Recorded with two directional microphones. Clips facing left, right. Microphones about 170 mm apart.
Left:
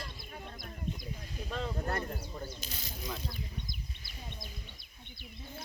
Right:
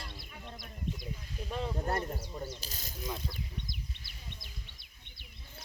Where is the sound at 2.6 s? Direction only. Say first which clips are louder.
Left 2 dB; 40° right (ahead or behind).